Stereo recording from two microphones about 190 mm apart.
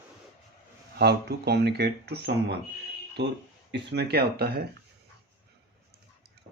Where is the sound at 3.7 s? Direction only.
65° right (ahead or behind).